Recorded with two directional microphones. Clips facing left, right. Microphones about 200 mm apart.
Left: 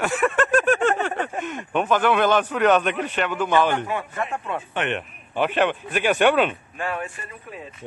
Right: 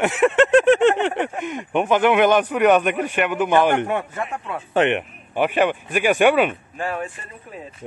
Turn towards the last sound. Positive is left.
turn(degrees=-30)  # may be behind; listen again after turning